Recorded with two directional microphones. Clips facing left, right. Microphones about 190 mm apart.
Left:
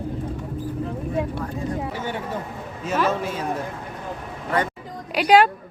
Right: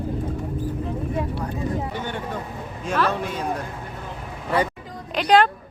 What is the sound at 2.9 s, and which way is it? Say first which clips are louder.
Speech: left 1 dB; 5° left (ahead or behind).